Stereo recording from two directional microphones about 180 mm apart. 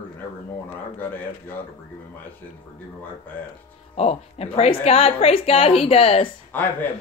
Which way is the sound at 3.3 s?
10° left (ahead or behind).